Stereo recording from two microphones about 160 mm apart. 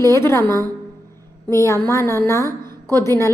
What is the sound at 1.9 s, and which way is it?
A woman's voice, 20° left (ahead or behind).